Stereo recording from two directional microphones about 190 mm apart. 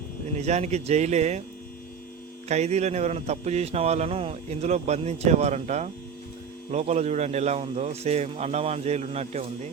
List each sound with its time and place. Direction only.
0.3 s a man's voice: 35° right (ahead or behind)
2.5 s a man's voice: 35° right (ahead or behind)